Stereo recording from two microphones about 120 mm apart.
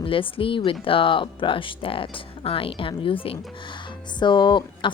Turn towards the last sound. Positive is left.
turn(degrees=40)  # may be behind; listen again after turning